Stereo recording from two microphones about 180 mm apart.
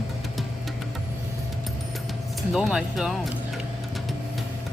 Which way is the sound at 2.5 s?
Centre (ahead or behind).